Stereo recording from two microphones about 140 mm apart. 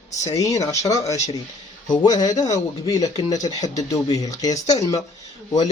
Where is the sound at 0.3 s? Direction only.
25° left (ahead or behind).